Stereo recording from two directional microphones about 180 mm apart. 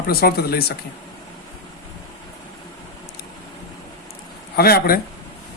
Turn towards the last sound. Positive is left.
turn(degrees=55)  # may be behind; listen again after turning